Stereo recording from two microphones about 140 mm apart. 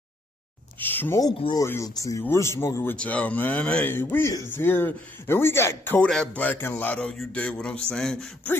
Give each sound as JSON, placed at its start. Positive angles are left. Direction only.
{"t": 0.7, "sound": "speech", "side_deg": 15}
{"t": 1.3, "sound": "speech", "side_deg": 40}
{"t": 1.6, "sound": "speech", "side_deg": 20}